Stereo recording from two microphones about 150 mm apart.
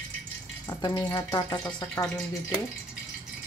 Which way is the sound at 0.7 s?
30° left (ahead or behind).